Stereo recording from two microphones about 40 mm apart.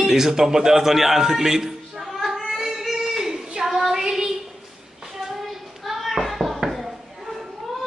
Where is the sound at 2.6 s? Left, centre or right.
Centre.